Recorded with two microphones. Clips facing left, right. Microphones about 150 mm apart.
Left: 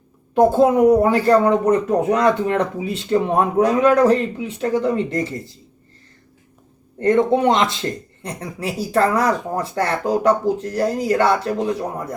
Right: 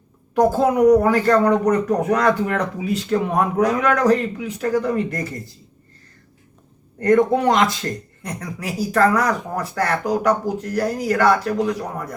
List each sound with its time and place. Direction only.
0.3 s speech: 25° left (ahead or behind)
7.0 s speech: 25° left (ahead or behind)